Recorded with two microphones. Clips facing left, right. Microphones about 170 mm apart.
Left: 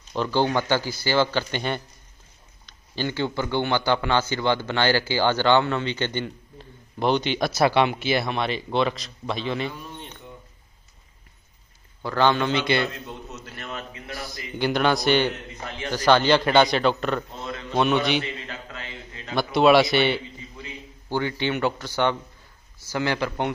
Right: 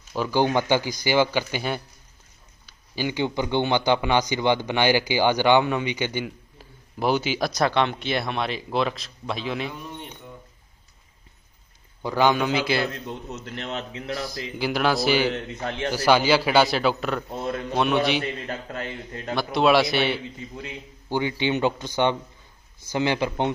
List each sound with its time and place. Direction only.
0.1 s a man's voice: 10° right (ahead or behind)
9.8 s a man's voice: 10° right (ahead or behind)
12.0 s a man's voice: 15° right (ahead or behind)
13.6 s a man's voice: 80° right
14.2 s a man's voice: centre (ahead or behind)
15.3 s a man's voice: 75° right (ahead or behind)
15.9 s a man's voice: 10° right (ahead or behind)
17.4 s a man's voice: 55° right (ahead or behind)
17.7 s a man's voice: centre (ahead or behind)
18.2 s a man's voice: 50° right (ahead or behind)
19.3 s a man's voice: centre (ahead or behind)
21.1 s a man's voice: 15° right (ahead or behind)